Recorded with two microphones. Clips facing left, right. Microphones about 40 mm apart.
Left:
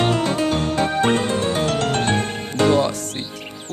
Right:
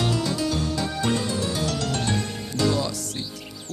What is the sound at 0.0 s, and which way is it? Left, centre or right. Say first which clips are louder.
Music: left 6 dB; left.